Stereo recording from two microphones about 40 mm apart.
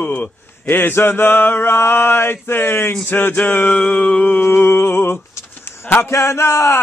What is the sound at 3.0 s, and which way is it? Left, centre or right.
Speech, left.